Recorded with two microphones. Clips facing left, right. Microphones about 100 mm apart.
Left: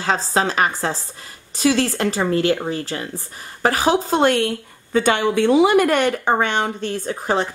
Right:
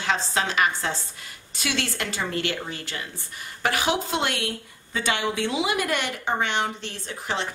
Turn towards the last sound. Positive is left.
turn(degrees=45)  # may be behind; listen again after turning